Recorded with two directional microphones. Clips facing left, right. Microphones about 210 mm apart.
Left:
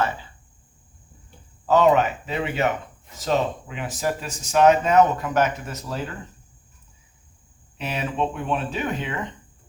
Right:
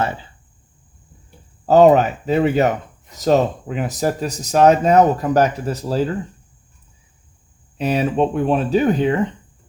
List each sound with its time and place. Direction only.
1.6 s speech: 40° right (ahead or behind)
7.8 s speech: 35° right (ahead or behind)